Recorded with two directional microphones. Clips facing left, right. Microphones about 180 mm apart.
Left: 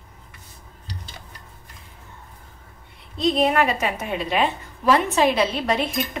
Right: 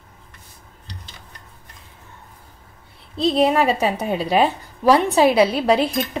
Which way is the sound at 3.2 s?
30° right (ahead or behind).